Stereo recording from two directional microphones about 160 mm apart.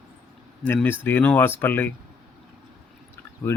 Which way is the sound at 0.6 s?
10° left (ahead or behind).